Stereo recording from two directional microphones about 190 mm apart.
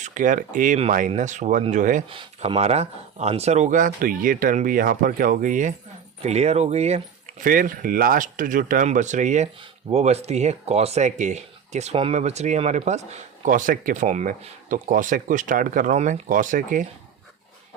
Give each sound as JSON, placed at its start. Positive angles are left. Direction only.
{"t": 0.0, "sound": "speech", "side_deg": -40}
{"t": 2.0, "sound": "speech", "side_deg": -25}
{"t": 7.4, "sound": "speech", "side_deg": -45}